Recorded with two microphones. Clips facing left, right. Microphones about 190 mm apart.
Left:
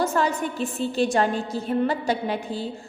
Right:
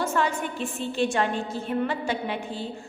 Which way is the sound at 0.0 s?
40° left (ahead or behind).